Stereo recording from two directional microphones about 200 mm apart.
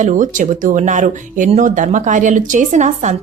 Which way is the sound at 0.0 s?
40° right (ahead or behind).